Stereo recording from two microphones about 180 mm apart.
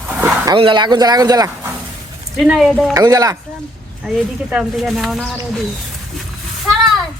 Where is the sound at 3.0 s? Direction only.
20° right (ahead or behind).